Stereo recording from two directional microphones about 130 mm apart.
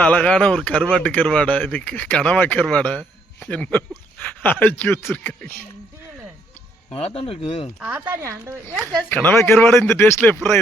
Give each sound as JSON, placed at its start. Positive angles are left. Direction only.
{"t": 0.0, "sound": "speech", "side_deg": 10}
{"t": 6.9, "sound": "speech", "side_deg": 50}
{"t": 7.8, "sound": "speech", "side_deg": -10}
{"t": 9.0, "sound": "speech", "side_deg": 15}